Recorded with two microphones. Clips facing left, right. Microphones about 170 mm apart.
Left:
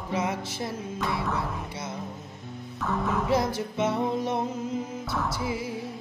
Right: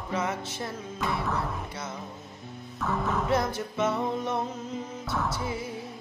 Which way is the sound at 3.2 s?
10° left (ahead or behind).